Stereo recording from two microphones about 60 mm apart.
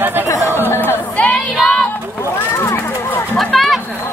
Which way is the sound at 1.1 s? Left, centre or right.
Left.